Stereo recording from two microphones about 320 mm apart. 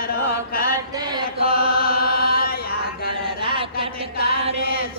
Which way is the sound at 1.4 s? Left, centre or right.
Left.